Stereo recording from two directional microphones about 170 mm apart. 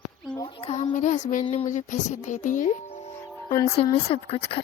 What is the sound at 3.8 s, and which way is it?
Speech, 35° left (ahead or behind).